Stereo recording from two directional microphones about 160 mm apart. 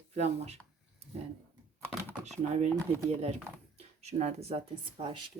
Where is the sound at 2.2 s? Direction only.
45° right (ahead or behind).